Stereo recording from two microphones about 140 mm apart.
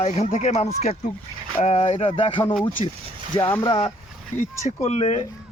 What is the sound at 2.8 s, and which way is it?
Speech, 45° left (ahead or behind).